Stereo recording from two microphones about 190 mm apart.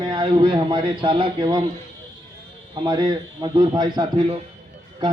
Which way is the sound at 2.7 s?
25° right (ahead or behind).